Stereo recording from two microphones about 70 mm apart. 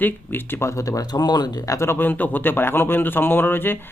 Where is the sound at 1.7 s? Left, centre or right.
Left.